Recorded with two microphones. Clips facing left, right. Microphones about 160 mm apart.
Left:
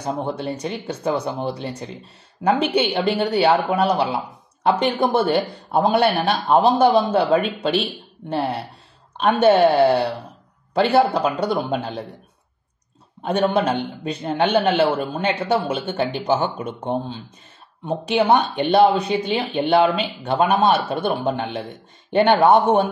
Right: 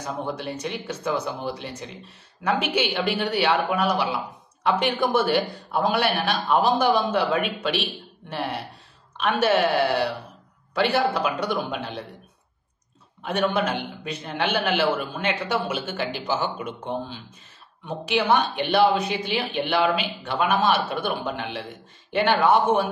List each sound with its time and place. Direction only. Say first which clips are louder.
0.0 s a man's voice: left 5 dB; 30° left (ahead or behind)
13.2 s a man's voice: left 4 dB; 35° left (ahead or behind)